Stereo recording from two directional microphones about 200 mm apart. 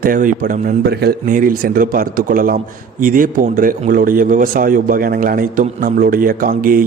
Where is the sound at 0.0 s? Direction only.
40° right (ahead or behind).